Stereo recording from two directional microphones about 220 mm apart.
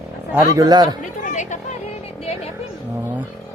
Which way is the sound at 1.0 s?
35° left (ahead or behind).